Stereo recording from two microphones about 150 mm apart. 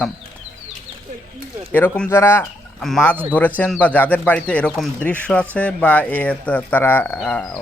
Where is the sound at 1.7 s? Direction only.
10° left (ahead or behind).